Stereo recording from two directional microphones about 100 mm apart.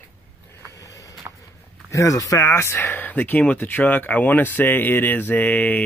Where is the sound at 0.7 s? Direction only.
35° left (ahead or behind).